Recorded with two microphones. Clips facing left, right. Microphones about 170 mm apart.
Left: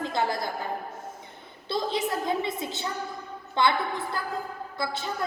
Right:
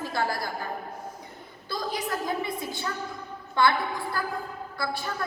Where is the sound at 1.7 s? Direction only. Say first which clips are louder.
Left 3 dB; 25° left (ahead or behind).